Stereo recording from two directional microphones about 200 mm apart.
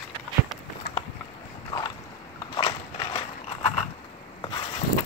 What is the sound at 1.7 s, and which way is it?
Boat, 20° left (ahead or behind).